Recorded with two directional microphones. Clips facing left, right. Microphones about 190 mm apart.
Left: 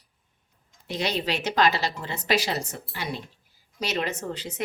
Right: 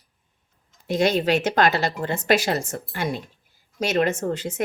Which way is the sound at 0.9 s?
50° right (ahead or behind).